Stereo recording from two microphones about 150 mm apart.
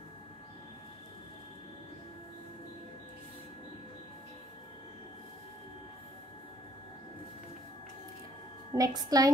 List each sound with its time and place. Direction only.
8.7 s a woman's voice: 25° right (ahead or behind)